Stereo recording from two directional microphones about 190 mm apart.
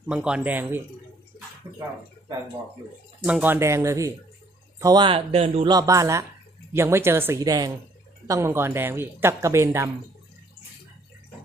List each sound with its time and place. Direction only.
0.1 s speech: 5° right (ahead or behind)
1.6 s dog: 15° right (ahead or behind)
3.3 s speech: 10° right (ahead or behind)